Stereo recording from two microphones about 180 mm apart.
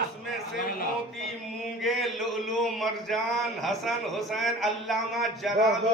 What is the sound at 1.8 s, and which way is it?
Speech, centre (ahead or behind).